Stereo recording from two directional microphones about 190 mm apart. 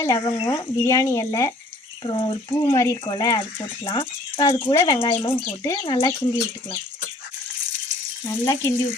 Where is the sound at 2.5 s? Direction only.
15° left (ahead or behind).